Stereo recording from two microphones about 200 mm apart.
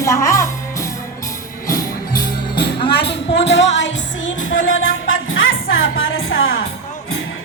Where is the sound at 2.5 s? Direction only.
25° left (ahead or behind).